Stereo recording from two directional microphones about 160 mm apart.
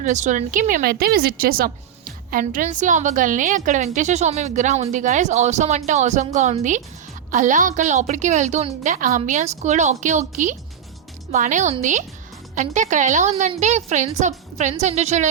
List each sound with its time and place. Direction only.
0.0 s a woman's voice: 50° right (ahead or behind)